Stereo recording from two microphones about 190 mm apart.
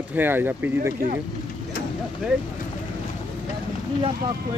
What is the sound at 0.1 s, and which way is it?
Speech, 10° right (ahead or behind).